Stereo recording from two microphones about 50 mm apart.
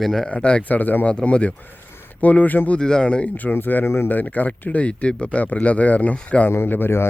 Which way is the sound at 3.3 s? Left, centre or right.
Left.